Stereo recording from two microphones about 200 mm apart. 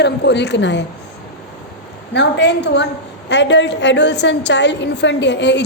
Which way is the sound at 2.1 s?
60° left (ahead or behind).